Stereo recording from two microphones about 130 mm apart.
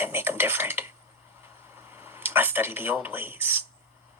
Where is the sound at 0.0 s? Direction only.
15° right (ahead or behind).